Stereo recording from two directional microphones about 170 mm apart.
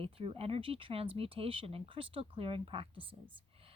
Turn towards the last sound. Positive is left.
turn(degrees=-30)  # may be behind; listen again after turning